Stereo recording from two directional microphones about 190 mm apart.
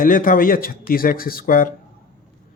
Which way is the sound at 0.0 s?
45° left (ahead or behind).